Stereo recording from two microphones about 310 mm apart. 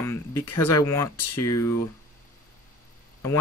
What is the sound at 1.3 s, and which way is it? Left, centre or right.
Speech, left.